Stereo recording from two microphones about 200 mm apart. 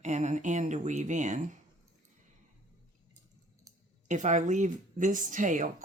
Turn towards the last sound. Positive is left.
turn(degrees=-40)  # may be behind; listen again after turning